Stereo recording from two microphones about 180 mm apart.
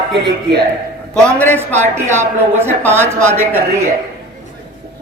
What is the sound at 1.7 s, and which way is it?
Speech, 40° right (ahead or behind).